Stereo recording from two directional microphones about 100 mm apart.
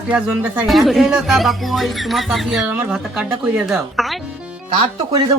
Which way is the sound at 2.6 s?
15° right (ahead or behind).